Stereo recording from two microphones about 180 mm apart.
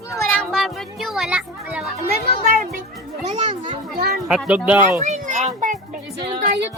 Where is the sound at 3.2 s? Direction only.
40° right (ahead or behind).